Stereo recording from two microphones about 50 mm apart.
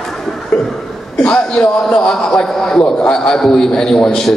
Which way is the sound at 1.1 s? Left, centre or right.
Centre.